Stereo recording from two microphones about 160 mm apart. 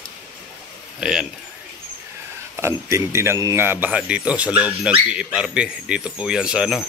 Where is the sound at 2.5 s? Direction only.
15° right (ahead or behind).